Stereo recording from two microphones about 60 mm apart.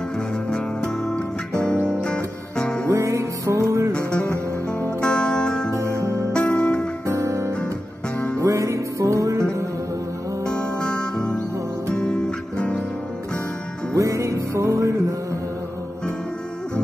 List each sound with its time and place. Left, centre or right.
1.0 s music: centre
2.9 s music: right
5.0 s music: centre
5.7 s music: right
6.3 s music: centre
7.1 s music: right
10.4 s music: centre
13.9 s music: right